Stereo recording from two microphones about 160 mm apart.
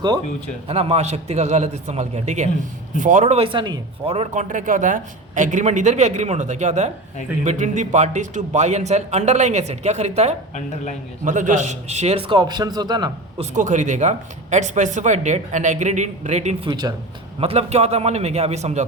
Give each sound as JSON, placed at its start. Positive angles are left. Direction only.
{"t": 0.7, "sound": "a man's voice", "side_deg": -40}
{"t": 13.4, "sound": "speech", "side_deg": -50}
{"t": 16.6, "sound": "speech", "side_deg": -25}
{"t": 17.4, "sound": "a man's voice", "side_deg": -40}